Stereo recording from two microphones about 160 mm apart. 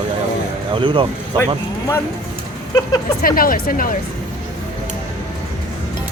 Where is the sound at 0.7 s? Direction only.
30° right (ahead or behind).